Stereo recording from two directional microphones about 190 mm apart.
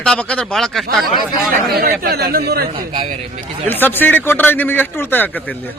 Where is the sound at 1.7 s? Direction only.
50° right (ahead or behind).